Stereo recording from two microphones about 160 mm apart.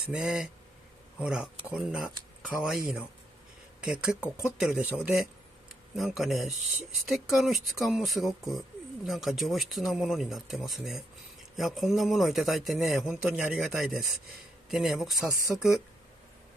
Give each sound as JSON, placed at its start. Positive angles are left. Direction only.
{"t": 0.1, "sound": "speech", "side_deg": -5}
{"t": 4.2, "sound": "speech", "side_deg": 15}
{"t": 4.6, "sound": "speech", "side_deg": -5}